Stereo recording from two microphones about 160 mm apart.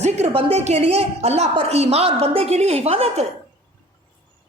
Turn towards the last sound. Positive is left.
turn(degrees=-40)  # may be behind; listen again after turning